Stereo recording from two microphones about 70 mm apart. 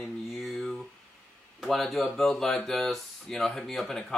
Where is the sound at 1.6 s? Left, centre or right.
Centre.